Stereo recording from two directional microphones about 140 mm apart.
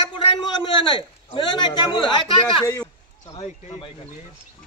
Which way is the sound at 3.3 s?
55° left (ahead or behind).